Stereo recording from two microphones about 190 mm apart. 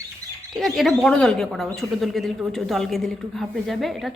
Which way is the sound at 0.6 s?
Centre (ahead or behind).